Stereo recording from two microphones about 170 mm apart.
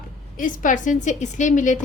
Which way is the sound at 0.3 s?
50° left (ahead or behind).